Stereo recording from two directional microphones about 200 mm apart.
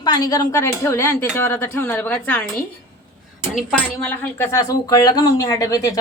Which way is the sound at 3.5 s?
5° left (ahead or behind).